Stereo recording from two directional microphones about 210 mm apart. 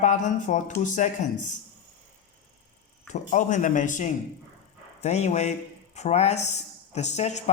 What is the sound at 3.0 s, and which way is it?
Speech, 35° left (ahead or behind).